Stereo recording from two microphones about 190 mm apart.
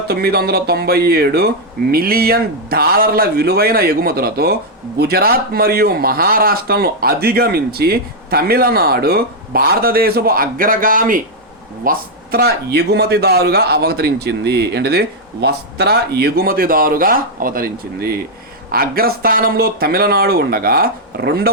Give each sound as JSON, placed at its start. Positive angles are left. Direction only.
{"t": 0.1, "sound": "speech", "side_deg": -55}